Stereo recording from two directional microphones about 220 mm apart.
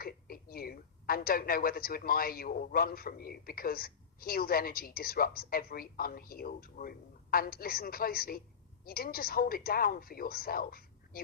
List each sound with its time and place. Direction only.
0.0 s a woman's voice: 40° left (ahead or behind)